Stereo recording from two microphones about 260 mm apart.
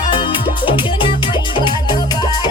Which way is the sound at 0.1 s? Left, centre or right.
Centre.